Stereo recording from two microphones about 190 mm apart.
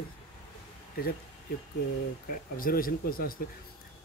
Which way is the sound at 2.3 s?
50° left (ahead or behind).